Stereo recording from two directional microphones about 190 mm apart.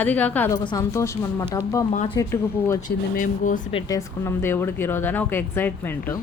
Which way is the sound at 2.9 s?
45° left (ahead or behind).